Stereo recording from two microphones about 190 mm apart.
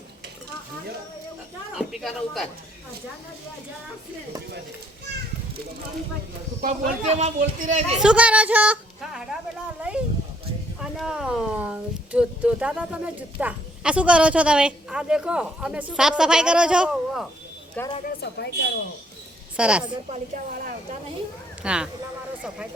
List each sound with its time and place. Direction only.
1.9 s a woman's voice: centre (ahead or behind)
6.6 s speech: 50° right (ahead or behind)
7.3 s speech: 35° right (ahead or behind)
7.9 s a woman's voice: 5° right (ahead or behind)
18.0 s a woman's voice: 60° left (ahead or behind)
19.5 s a woman's voice: 5° right (ahead or behind)
19.8 s speech: 30° right (ahead or behind)
21.6 s a woman's voice: 5° right (ahead or behind)